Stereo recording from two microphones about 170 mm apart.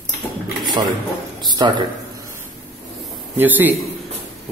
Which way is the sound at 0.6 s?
25° right (ahead or behind).